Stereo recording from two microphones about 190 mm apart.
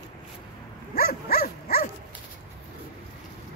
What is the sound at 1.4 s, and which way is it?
Dog, 50° left (ahead or behind).